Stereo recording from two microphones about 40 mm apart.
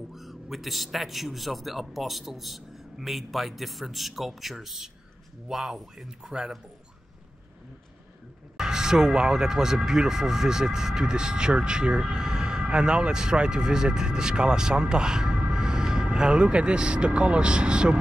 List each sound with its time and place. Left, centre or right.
0.1 s a man's voice: centre
8.5 s speech: centre